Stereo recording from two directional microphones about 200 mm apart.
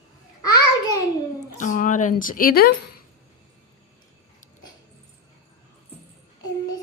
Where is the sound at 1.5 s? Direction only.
40° left (ahead or behind).